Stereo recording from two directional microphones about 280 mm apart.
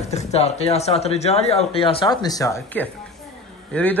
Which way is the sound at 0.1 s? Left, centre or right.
Left.